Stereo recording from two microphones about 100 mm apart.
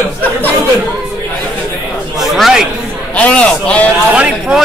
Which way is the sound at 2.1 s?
Centre (ahead or behind).